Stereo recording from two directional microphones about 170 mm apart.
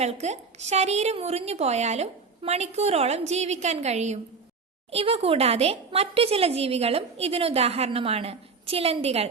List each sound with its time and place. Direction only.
0.0 s speech: 40° right (ahead or behind)